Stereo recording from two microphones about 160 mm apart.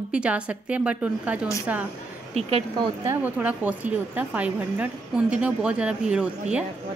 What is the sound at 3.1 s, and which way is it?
Speech, 10° right (ahead or behind).